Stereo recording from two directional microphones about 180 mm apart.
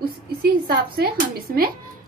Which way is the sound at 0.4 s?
55° right (ahead or behind).